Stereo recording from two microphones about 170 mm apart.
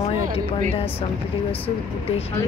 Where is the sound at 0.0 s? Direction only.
35° left (ahead or behind).